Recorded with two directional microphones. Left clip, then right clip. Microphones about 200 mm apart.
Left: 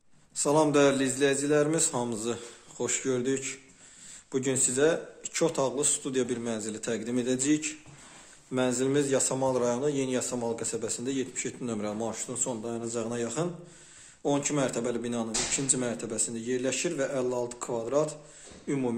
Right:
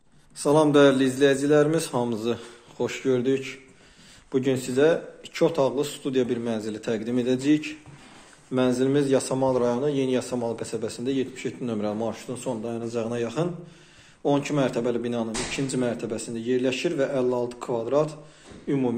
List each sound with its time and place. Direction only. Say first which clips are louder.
0.4 s a man's voice: right 5 dB; 15° left (ahead or behind)